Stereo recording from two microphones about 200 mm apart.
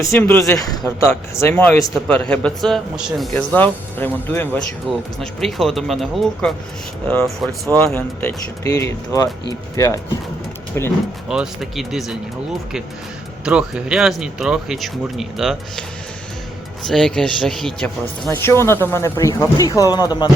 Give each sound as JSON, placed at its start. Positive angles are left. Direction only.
{"t": 0.0, "sound": "a man's voice", "side_deg": 10}
{"t": 4.9, "sound": "a man's voice", "side_deg": 0}
{"t": 7.9, "sound": "speech", "side_deg": 10}
{"t": 11.3, "sound": "a man's voice", "side_deg": 0}
{"t": 13.4, "sound": "a man's voice", "side_deg": -5}
{"t": 16.8, "sound": "speech", "side_deg": 0}